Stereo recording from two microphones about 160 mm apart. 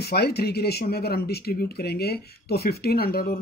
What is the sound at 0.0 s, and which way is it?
Speech, 90° left.